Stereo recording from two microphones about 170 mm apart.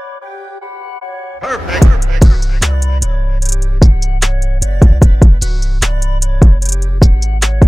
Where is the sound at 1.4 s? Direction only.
Centre (ahead or behind).